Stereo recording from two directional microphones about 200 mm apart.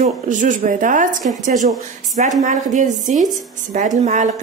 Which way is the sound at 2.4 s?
40° right (ahead or behind).